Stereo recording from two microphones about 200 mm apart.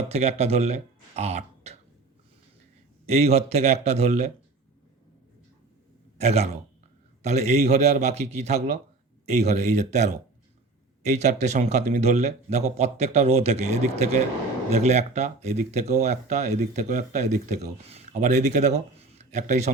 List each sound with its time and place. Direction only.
0.0 s speech: 30° right (ahead or behind)
3.2 s speech: 30° right (ahead or behind)
6.1 s a man's voice: 35° right (ahead or behind)